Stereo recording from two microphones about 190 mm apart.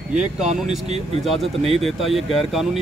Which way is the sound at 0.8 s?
35° right (ahead or behind).